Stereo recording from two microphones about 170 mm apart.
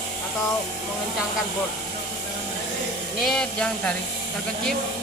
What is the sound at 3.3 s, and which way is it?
Speech, 5° left (ahead or behind).